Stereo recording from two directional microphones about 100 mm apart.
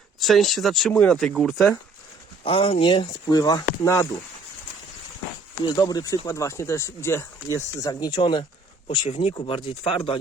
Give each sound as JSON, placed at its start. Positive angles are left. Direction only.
{"t": 0.2, "sound": "speech", "side_deg": 0}
{"t": 2.4, "sound": "speech", "side_deg": 70}
{"t": 5.6, "sound": "speech", "side_deg": 40}
{"t": 9.0, "sound": "speech", "side_deg": 90}
{"t": 9.6, "sound": "speech", "side_deg": 60}